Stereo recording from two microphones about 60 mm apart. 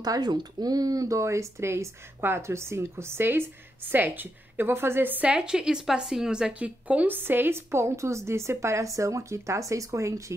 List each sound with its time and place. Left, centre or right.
0.0 s a woman's voice: right
5.2 s a woman's voice: centre
6.6 s a woman's voice: right
7.2 s a woman's voice: right